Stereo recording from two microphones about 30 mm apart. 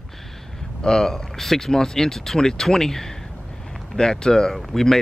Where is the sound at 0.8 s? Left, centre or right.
Centre.